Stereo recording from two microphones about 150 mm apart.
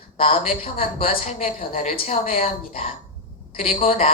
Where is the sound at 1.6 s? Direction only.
70° left (ahead or behind).